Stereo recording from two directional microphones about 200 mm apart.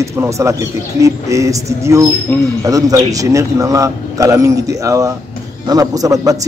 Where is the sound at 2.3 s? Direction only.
10° left (ahead or behind).